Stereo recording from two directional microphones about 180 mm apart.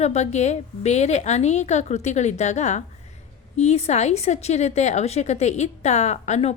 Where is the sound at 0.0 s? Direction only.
40° left (ahead or behind).